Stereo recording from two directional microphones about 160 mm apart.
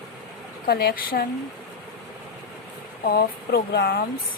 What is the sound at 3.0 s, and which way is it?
Speech, 70° left (ahead or behind).